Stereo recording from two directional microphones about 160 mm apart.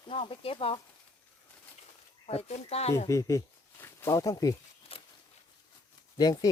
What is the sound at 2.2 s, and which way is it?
Speech, 40° left (ahead or behind).